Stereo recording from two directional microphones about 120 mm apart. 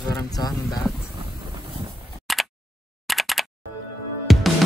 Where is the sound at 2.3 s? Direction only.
Centre (ahead or behind).